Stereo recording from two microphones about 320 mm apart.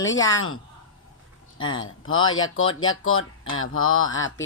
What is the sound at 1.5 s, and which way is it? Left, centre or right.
Speech, centre.